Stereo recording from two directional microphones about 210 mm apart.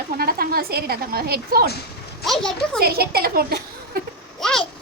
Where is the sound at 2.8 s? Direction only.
45° right (ahead or behind).